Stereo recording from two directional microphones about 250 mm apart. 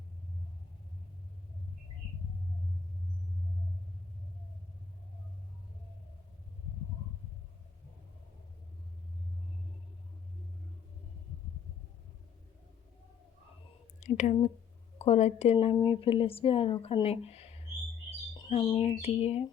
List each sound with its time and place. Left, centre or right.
14.0 s speech: left